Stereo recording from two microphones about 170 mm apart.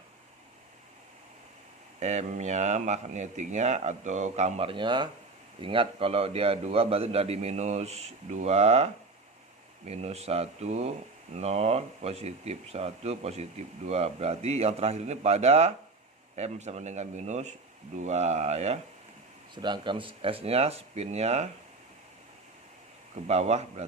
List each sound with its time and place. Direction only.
2.0 s a man's voice: 40° right (ahead or behind)
19.6 s a man's voice: 25° right (ahead or behind)
23.2 s a man's voice: 40° right (ahead or behind)